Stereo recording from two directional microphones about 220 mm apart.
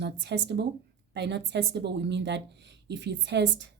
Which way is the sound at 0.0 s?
50° right (ahead or behind).